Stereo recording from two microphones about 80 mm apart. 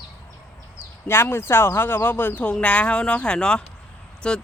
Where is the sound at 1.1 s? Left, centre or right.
Left.